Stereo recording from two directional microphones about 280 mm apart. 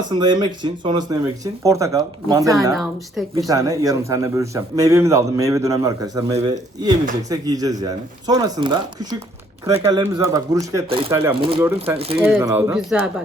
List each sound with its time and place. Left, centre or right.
0.1 s a man's voice: centre
2.7 s speech: centre
3.3 s a man's voice: centre
11.6 s a man's voice: centre